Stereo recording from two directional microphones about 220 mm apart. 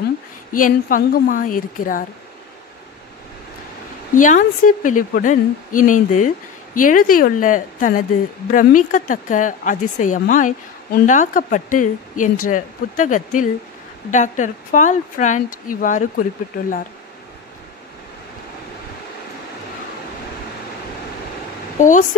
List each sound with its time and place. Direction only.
0.5 s speech: 40° left (ahead or behind)
4.1 s speech: 35° left (ahead or behind)
21.7 s speech: 35° left (ahead or behind)